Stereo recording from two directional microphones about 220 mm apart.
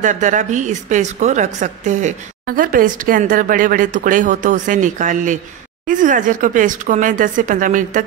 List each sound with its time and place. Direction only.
0.0 s a woman's voice: 35° right (ahead or behind)